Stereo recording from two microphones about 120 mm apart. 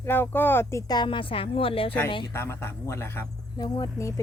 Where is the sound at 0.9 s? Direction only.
40° left (ahead or behind).